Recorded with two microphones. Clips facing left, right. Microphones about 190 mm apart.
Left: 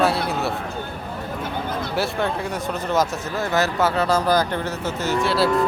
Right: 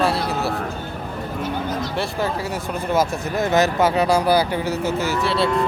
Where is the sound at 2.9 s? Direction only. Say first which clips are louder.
Right 2 dB; 15° right (ahead or behind).